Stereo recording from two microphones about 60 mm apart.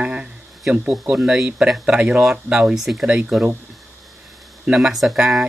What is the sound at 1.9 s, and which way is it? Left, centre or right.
Speech, right.